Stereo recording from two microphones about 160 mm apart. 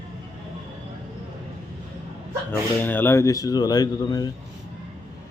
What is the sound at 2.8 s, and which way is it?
Speech, 10° left (ahead or behind).